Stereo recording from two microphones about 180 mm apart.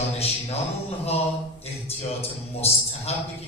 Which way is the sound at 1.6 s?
35° left (ahead or behind).